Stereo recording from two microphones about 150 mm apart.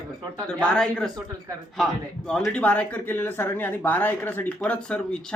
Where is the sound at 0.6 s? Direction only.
5° left (ahead or behind).